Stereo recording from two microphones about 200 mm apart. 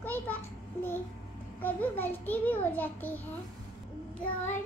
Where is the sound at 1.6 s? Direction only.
10° left (ahead or behind).